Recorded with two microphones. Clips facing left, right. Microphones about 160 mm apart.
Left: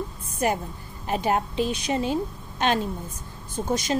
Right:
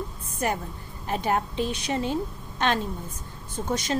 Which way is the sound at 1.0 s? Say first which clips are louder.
Left 2 dB; 20° left (ahead or behind).